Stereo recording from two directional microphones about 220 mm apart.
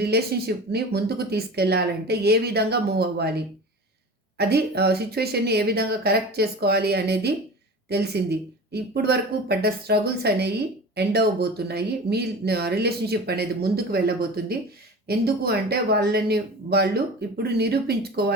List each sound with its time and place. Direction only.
0.0 s speech: 45° right (ahead or behind)